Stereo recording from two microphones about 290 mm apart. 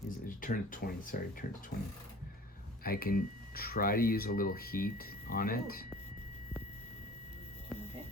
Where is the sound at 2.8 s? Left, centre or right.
Left.